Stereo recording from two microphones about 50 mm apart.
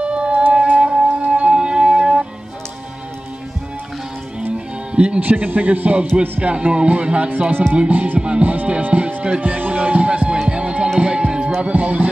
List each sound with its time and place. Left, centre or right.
0.0 s music: right
0.3 s music: right
0.6 s music: right
4.9 s music: right
5.2 s a man's voice: right
8.2 s speech: right
9.8 s music: right
11.6 s speech: right